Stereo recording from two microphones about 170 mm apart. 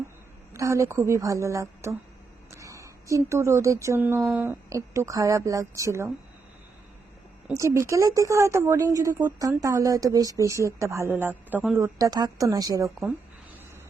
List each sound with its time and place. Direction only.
0.5 s speech: 20° right (ahead or behind)
2.6 s a sound: 15° right (ahead or behind)
3.2 s speech: 15° right (ahead or behind)
7.5 s a man's voice: 15° right (ahead or behind)
11.8 s speech: 20° right (ahead or behind)